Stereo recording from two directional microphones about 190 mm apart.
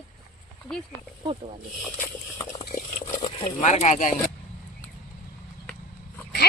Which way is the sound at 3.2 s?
35° left (ahead or behind).